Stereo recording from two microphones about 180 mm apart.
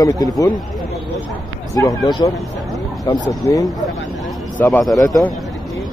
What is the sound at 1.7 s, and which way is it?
A man's voice, 20° left (ahead or behind).